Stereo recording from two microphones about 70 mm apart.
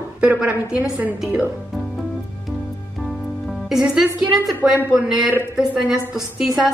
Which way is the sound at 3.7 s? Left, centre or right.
Centre.